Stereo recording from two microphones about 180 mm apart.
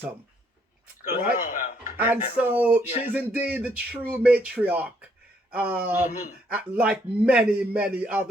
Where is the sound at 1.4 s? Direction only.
45° left (ahead or behind).